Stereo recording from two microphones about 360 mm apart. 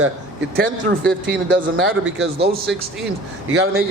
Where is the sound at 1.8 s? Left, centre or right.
Right.